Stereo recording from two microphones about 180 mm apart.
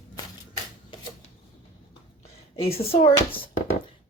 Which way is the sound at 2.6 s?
35° left (ahead or behind).